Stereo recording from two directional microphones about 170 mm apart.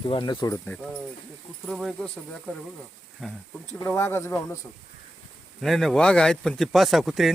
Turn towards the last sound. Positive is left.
turn(degrees=0)  # may be behind; listen again after turning